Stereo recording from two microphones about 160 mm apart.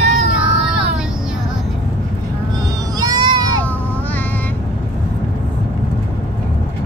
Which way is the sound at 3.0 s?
25° right (ahead or behind).